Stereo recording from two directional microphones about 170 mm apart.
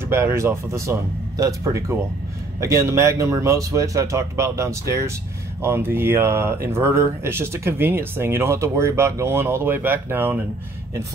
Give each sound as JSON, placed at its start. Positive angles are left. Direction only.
{"t": 0.1, "sound": "speech", "side_deg": -15}